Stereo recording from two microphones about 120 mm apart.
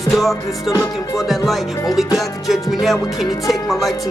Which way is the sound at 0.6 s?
30° left (ahead or behind).